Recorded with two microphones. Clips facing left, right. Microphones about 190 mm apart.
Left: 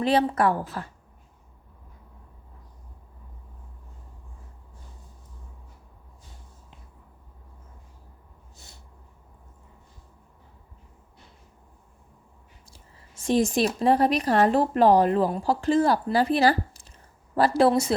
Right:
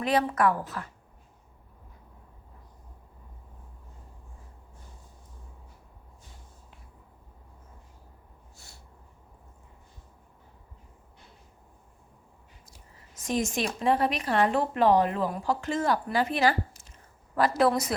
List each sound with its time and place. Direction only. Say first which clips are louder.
0.0 s a woman's voice: left 3 dB; 30° left (ahead or behind)
8.5 s snort: left 3 dB; 20° left (ahead or behind)
12.7 s a woman's voice: left 2 dB; 30° left (ahead or behind)